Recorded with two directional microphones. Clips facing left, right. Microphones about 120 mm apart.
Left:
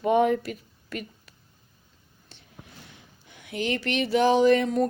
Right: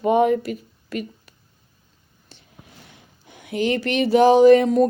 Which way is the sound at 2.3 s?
5° right (ahead or behind).